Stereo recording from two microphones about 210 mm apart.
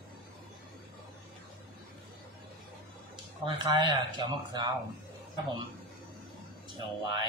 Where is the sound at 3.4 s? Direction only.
20° right (ahead or behind).